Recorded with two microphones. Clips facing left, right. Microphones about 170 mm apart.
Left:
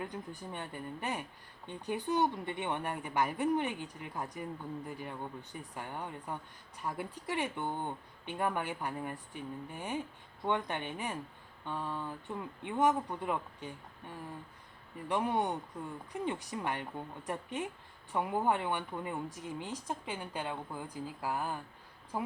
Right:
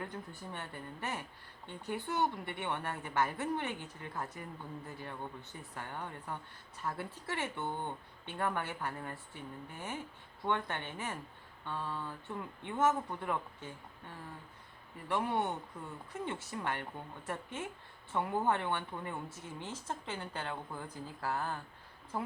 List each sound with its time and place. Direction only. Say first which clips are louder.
0.0 s speech: left 2 dB; 15° left (ahead or behind)